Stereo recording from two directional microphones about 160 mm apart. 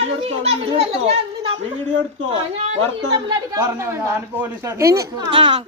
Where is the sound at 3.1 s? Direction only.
20° right (ahead or behind).